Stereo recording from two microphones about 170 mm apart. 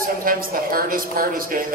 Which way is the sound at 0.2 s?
55° right (ahead or behind).